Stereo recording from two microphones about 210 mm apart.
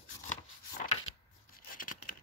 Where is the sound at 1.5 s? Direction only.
40° left (ahead or behind).